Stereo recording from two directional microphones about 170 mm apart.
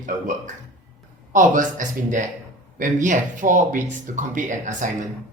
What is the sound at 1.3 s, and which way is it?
Speech, 50° right (ahead or behind).